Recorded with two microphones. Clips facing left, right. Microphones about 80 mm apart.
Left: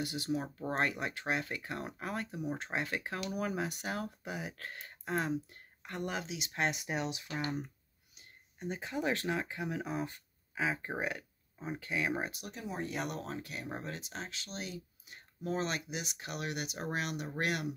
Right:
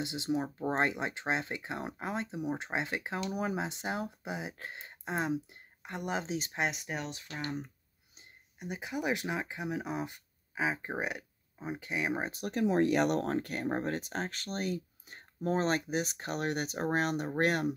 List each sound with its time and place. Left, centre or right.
0.0 s speech: right
6.2 s speech: right
6.7 s speech: centre
8.5 s speech: centre
12.4 s speech: right